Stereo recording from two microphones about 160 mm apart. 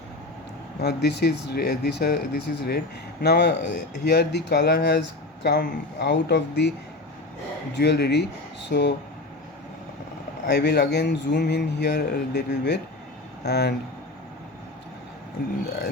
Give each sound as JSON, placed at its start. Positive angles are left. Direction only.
{"t": 0.8, "sound": "speech", "side_deg": 90}
{"t": 7.8, "sound": "speech", "side_deg": 90}
{"t": 10.4, "sound": "speech", "side_deg": 90}